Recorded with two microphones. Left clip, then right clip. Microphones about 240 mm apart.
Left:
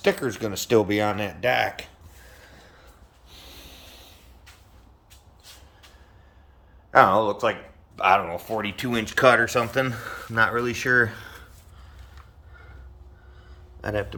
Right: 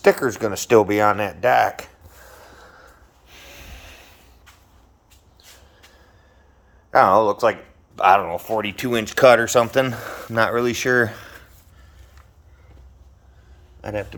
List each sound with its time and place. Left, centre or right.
0.2 s speech: centre
3.2 s snort: right
6.9 s speech: right
13.8 s speech: centre